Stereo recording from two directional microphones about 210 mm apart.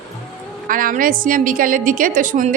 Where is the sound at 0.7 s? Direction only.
40° right (ahead or behind).